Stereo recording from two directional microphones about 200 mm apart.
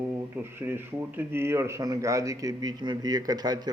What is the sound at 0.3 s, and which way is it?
Speech, 10° right (ahead or behind).